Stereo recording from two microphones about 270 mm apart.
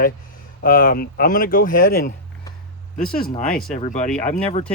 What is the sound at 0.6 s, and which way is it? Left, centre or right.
Speech, left.